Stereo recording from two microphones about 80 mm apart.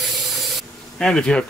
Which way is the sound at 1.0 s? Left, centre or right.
Centre.